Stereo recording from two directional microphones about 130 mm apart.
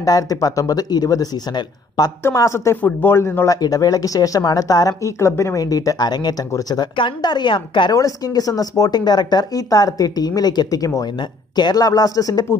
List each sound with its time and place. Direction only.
0.0 s speech: 30° left (ahead or behind)
2.2 s speech: 20° left (ahead or behind)
3.6 s speech: 30° left (ahead or behind)
7.9 s speech: 30° left (ahead or behind)